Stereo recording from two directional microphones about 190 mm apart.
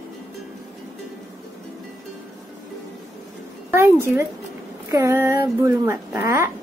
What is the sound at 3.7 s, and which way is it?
A woman's voice, 15° right (ahead or behind).